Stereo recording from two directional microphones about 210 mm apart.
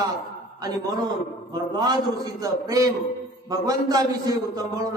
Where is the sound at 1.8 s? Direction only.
20° right (ahead or behind).